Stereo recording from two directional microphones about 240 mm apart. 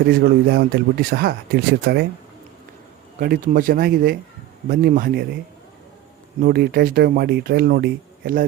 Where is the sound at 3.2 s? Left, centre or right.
Right.